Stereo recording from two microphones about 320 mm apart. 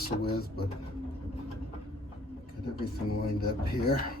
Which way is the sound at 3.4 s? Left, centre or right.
Left.